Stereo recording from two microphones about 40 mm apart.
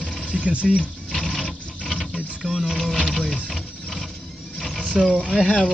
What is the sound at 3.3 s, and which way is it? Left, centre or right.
Sewing machine, left.